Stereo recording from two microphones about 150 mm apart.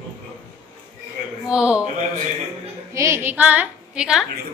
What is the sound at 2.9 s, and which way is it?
A woman's voice, 20° right (ahead or behind).